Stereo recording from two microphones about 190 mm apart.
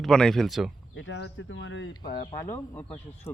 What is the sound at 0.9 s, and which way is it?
Speech, 75° left (ahead or behind).